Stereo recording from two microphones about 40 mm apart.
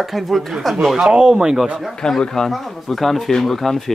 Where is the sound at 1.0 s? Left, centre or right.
Right.